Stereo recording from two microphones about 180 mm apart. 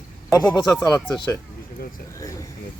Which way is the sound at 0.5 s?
20° left (ahead or behind).